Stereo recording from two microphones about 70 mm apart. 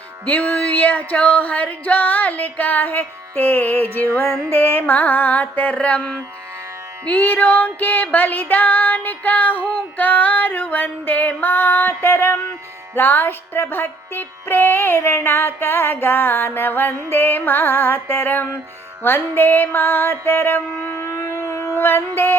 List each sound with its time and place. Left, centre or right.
0.3 s female singing: left
12.9 s music: left